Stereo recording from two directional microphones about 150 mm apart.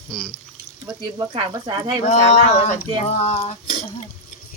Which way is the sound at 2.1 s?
50° left (ahead or behind).